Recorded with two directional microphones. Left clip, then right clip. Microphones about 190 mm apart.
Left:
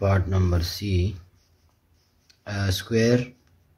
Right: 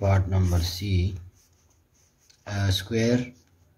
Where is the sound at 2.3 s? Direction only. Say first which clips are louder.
Even; 25° left (ahead or behind).